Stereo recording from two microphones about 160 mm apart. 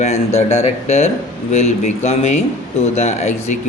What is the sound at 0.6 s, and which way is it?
A man's voice, 45° left (ahead or behind).